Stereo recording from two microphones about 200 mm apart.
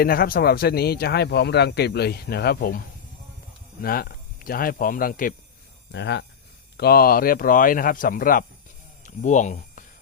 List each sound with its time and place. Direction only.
0.0 s speech: 45° left (ahead or behind)
3.8 s speech: 50° left (ahead or behind)
5.9 s speech: 60° left (ahead or behind); by 9.8 s 40° left (ahead or behind)